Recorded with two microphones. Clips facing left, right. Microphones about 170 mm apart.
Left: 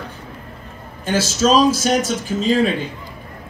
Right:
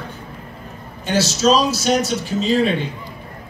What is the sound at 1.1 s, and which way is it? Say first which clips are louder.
A man's voice: even; 50° left (ahead or behind).